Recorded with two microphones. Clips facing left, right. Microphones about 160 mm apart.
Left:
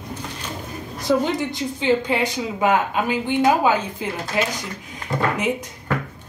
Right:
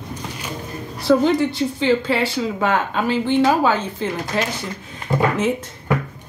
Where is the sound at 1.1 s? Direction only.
15° left (ahead or behind).